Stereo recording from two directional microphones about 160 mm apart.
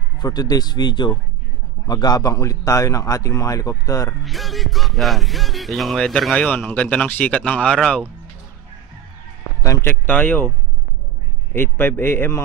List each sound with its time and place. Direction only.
0.2 s a man's voice: 25° left (ahead or behind)
4.2 s speech: centre (ahead or behind)
9.6 s a man's voice: 20° left (ahead or behind)
11.5 s a man's voice: 15° left (ahead or behind)